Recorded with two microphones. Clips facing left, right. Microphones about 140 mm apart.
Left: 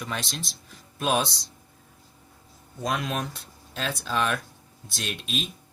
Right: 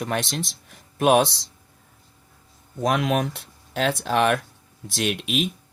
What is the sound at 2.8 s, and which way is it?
Speech, 75° right (ahead or behind).